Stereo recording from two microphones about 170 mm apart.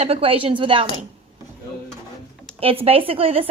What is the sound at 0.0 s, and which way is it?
Speech, 35° right (ahead or behind).